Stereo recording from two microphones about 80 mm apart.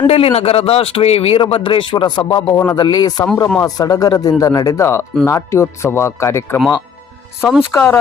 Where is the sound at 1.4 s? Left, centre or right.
Left.